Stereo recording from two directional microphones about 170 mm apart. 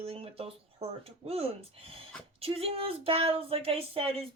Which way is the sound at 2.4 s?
35° right (ahead or behind).